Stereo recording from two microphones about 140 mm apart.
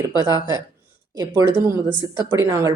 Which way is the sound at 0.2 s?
25° right (ahead or behind).